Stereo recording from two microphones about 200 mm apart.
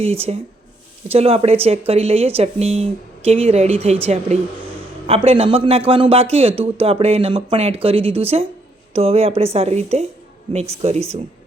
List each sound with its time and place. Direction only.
0.0 s a man's voice: 30° right (ahead or behind)